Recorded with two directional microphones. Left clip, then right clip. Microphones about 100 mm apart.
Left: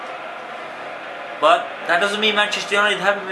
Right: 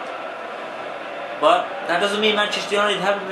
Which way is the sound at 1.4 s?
15° left (ahead or behind).